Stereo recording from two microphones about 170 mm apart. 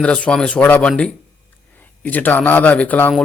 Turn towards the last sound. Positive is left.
turn(degrees=10)  # may be behind; listen again after turning